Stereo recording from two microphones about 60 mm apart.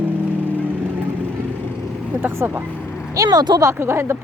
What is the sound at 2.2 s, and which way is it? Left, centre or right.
Speech, right.